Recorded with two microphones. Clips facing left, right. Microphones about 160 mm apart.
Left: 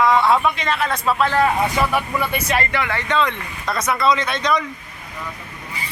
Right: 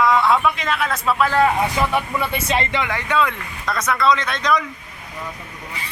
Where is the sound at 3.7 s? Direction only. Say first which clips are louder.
Even; 5° left (ahead or behind).